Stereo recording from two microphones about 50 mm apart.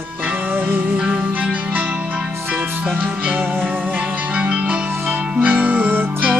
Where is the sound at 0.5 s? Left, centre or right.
Right.